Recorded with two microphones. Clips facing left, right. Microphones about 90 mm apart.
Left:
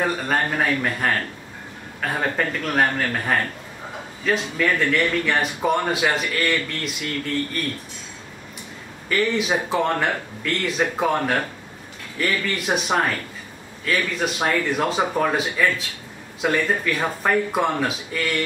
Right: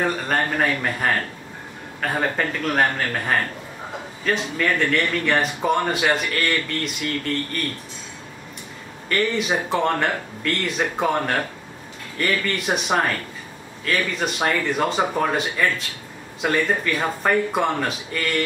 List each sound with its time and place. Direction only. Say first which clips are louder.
0.0 s speech: even; centre (ahead or behind)
9.1 s speech: left 1 dB; centre (ahead or behind)